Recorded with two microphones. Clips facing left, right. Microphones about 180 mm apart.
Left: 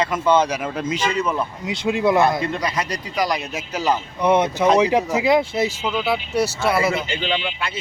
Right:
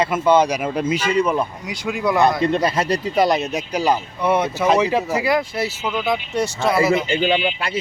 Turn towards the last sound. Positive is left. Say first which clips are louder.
# right 5 dB
turn(degrees=-40)  # may be behind; listen again after turning